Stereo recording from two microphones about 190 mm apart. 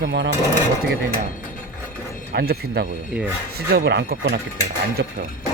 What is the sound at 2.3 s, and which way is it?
Speech, 55° right (ahead or behind).